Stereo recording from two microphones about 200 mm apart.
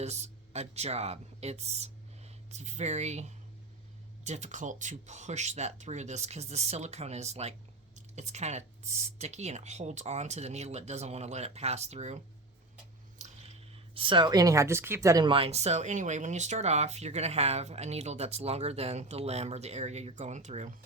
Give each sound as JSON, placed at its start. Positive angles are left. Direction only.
{"t": 0.0, "sound": "speech", "side_deg": -35}
{"t": 13.1, "sound": "a sound", "side_deg": -35}
{"t": 13.9, "sound": "speech", "side_deg": -25}